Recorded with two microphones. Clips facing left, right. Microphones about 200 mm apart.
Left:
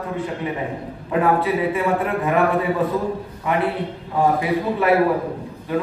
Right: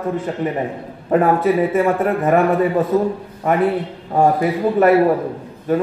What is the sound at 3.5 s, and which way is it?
A man's voice, 45° right (ahead or behind).